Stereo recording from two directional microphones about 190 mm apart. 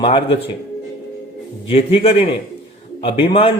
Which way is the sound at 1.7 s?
30° left (ahead or behind).